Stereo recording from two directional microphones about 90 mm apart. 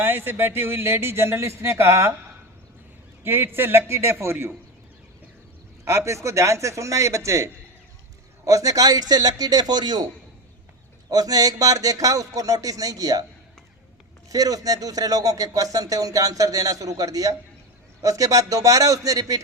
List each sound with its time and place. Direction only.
0.0 s speech: 25° right (ahead or behind)
3.2 s speech: 25° right (ahead or behind)
5.8 s speech: 35° right (ahead or behind); by 10.1 s 50° right (ahead or behind)
11.1 s speech: 45° right (ahead or behind)
14.3 s speech: 40° right (ahead or behind)